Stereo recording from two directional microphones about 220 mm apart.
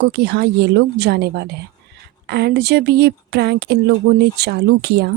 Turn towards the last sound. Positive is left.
turn(degrees=-50)  # may be behind; listen again after turning